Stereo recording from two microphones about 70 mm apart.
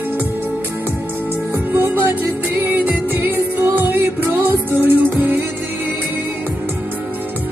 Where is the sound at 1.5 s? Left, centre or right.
Right.